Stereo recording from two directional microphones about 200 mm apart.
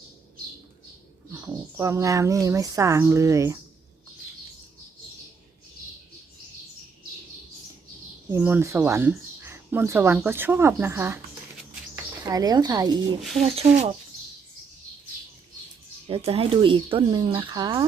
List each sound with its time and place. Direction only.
1.3 s speech: 10° right (ahead or behind)
8.3 s speech: 10° right (ahead or behind)
12.2 s speech: 20° right (ahead or behind)
13.4 s speech: 30° right (ahead or behind)
16.0 s speech: 30° right (ahead or behind)